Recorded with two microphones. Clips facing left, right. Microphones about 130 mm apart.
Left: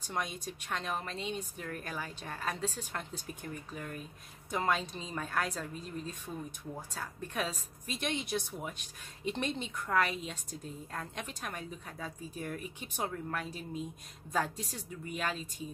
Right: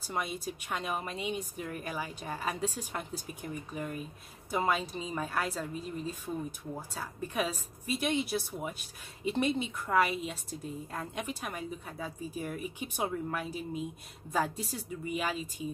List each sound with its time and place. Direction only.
0.0 s a woman's voice: 5° right (ahead or behind)